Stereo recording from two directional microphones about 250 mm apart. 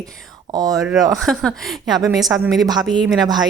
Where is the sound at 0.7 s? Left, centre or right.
Centre.